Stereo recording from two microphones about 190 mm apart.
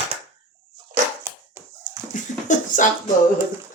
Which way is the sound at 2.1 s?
45° left (ahead or behind).